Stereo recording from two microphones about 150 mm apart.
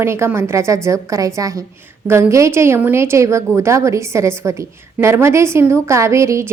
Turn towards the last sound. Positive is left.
turn(degrees=-20)  # may be behind; listen again after turning